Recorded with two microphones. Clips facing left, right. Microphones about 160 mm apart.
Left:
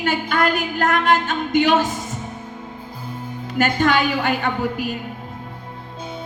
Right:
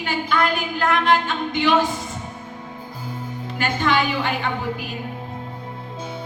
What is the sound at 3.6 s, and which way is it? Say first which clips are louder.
Speech: left 3 dB; 50° left (ahead or behind).